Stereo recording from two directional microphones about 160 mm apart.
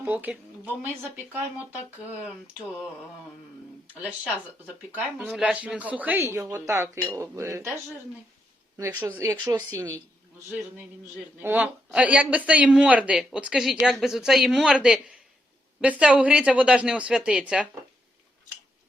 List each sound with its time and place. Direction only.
0.0 s speech: 10° right (ahead or behind)
4.0 s speech: 10° right (ahead or behind)
8.8 s speech: 10° right (ahead or behind)
11.3 s a man's voice: 10° right (ahead or behind)